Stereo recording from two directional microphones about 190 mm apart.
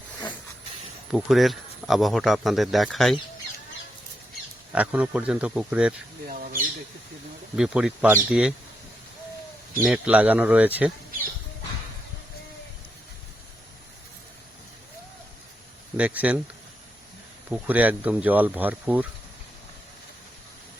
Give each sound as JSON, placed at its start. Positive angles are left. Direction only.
{"t": 1.1, "sound": "speech", "side_deg": 0}
{"t": 4.7, "sound": "speech", "side_deg": -5}
{"t": 6.2, "sound": "squawk", "side_deg": -50}
{"t": 7.5, "sound": "speech", "side_deg": -5}
{"t": 9.8, "sound": "speech", "side_deg": -5}
{"t": 16.0, "sound": "speech", "side_deg": -5}
{"t": 17.5, "sound": "speech", "side_deg": -10}